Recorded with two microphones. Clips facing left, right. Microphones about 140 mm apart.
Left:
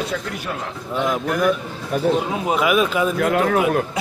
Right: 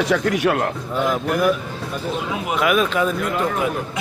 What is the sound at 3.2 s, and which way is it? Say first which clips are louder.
Speech: left 4 dB; 60° left (ahead or behind).